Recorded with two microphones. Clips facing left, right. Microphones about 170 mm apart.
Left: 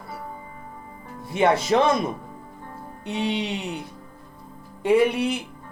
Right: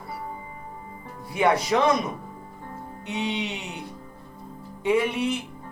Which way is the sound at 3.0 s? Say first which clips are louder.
Left 3 dB; 35° left (ahead or behind).